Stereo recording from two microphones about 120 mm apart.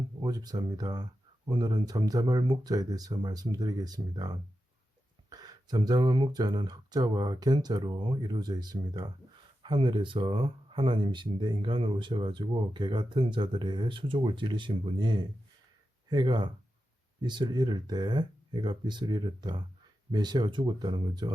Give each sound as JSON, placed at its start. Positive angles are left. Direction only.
{"t": 0.2, "sound": "speech", "side_deg": -30}